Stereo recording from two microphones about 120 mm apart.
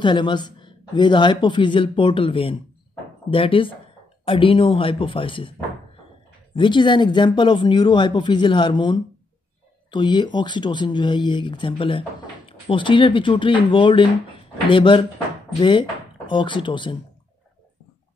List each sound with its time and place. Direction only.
0.0 s speech: 40° left (ahead or behind)